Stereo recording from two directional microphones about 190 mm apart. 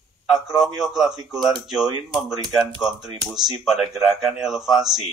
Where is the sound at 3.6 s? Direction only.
Centre (ahead or behind).